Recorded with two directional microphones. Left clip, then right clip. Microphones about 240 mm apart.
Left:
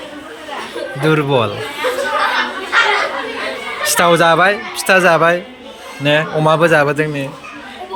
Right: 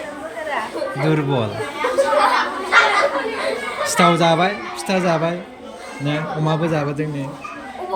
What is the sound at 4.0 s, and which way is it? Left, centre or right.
Speech, centre.